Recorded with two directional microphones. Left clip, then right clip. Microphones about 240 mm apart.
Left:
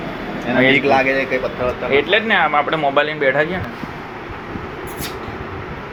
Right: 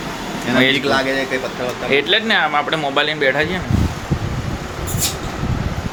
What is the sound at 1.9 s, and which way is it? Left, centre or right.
Speech, right.